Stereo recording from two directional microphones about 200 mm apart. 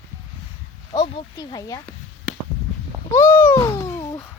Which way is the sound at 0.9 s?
25° left (ahead or behind).